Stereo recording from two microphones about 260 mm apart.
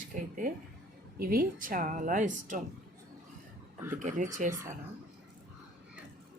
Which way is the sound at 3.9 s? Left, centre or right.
Right.